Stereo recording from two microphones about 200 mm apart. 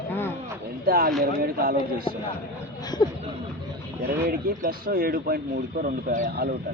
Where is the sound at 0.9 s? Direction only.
45° right (ahead or behind).